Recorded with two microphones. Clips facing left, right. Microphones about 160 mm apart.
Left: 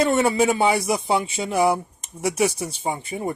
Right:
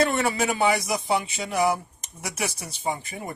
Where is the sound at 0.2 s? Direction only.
30° left (ahead or behind).